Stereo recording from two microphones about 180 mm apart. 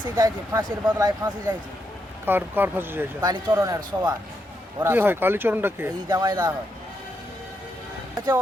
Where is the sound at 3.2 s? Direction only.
25° right (ahead or behind).